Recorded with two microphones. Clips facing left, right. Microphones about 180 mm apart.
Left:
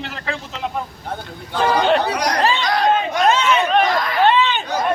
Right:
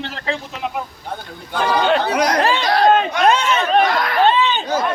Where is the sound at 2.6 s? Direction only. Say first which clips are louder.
Right 3 dB; 30° right (ahead or behind).